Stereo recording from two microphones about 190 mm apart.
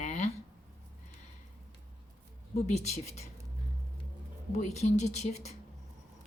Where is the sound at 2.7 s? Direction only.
35° left (ahead or behind).